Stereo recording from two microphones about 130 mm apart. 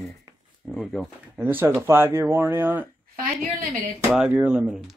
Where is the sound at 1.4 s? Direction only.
15° right (ahead or behind).